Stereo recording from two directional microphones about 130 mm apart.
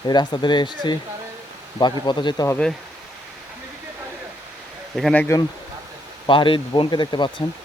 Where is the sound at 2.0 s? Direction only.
35° left (ahead or behind).